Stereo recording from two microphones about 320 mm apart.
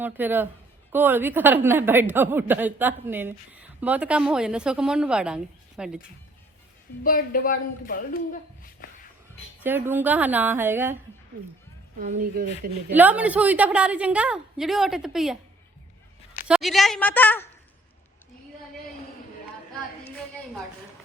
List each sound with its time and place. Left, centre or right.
0.0 s a woman's voice: centre
7.0 s speech: left
9.6 s a woman's voice: centre
11.9 s speech: right
12.9 s a woman's voice: centre
16.5 s a woman's voice: centre